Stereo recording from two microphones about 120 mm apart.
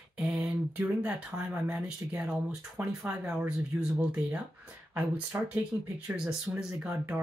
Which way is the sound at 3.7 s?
20° right (ahead or behind).